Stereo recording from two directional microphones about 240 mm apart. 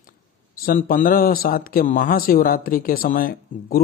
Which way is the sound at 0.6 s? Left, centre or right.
Left.